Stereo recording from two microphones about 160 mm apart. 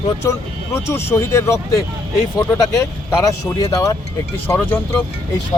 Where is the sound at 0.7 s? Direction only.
15° left (ahead or behind).